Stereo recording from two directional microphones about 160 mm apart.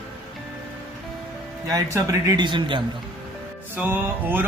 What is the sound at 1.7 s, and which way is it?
Speech, 20° right (ahead or behind).